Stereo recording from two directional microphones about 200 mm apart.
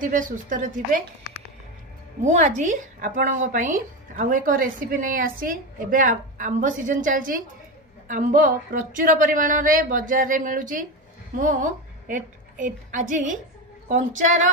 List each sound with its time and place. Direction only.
0.0 s speech: 40° right (ahead or behind)
2.2 s a woman's voice: 35° right (ahead or behind)